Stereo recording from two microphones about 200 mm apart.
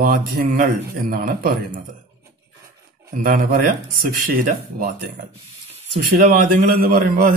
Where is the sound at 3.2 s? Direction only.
45° right (ahead or behind).